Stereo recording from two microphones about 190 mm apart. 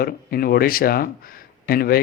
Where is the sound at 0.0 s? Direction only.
50° left (ahead or behind).